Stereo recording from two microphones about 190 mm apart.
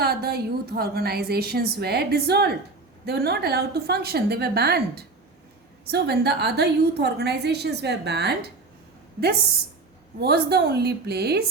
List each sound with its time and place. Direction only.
0.0 s a woman's voice: 55° right (ahead or behind)
10.2 s a woman's voice: 60° right (ahead or behind)